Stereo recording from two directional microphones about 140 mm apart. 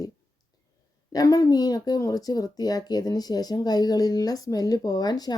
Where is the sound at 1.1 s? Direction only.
25° left (ahead or behind).